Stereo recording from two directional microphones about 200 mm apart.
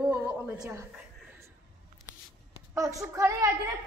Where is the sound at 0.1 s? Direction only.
10° right (ahead or behind).